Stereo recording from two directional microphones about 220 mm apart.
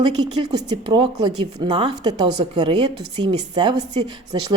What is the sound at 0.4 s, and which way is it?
Speech, 20° right (ahead or behind).